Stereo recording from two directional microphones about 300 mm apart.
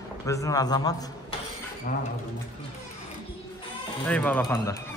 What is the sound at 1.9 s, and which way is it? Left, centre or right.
Speech, left.